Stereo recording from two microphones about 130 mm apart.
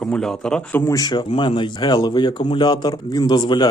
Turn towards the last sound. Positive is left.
turn(degrees=35)  # may be behind; listen again after turning